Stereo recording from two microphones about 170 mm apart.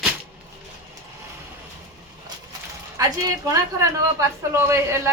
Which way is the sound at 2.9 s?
20° right (ahead or behind).